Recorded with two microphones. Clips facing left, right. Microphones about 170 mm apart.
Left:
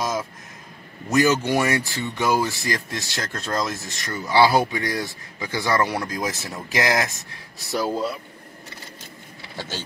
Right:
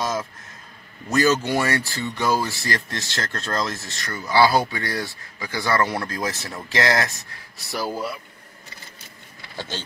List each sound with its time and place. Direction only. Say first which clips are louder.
0.0 s a sound: even; 15° left (ahead or behind)
1.1 s speech: left 1 dB; 15° left (ahead or behind)
9.6 s speech: even; 10° left (ahead or behind)